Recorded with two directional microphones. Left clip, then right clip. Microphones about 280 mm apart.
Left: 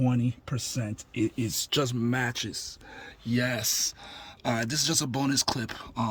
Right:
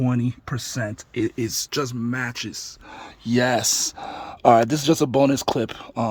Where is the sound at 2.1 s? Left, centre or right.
Centre.